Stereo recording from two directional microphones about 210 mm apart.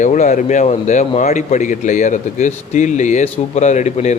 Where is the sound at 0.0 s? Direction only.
35° left (ahead or behind).